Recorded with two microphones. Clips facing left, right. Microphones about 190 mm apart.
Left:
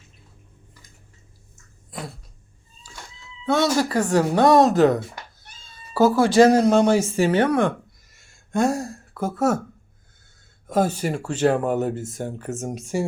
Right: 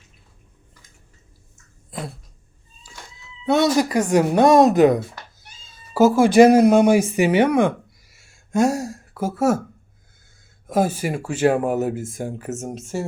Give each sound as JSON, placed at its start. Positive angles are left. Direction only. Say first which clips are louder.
{"t": 3.4, "sound": "speech", "louder": "right 3 dB", "side_deg": -20}
{"t": 6.1, "sound": "speech", "louder": "right 4 dB", "side_deg": -15}
{"t": 8.1, "sound": "a sound", "louder": "right 3 dB", "side_deg": -10}
{"t": 10.7, "sound": "speech", "louder": "right 1 dB", "side_deg": -10}
{"t": 12.9, "sound": "speech", "louder": "left 2 dB", "side_deg": 10}